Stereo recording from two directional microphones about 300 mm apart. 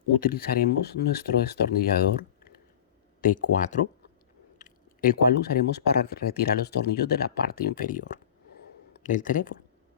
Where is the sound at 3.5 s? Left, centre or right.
Left.